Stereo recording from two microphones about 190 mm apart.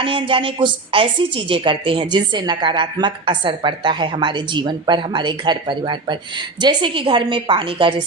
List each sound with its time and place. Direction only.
0.0 s a woman's voice: 25° right (ahead or behind)